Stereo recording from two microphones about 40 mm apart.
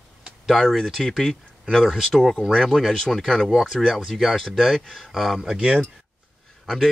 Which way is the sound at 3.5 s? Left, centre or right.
Centre.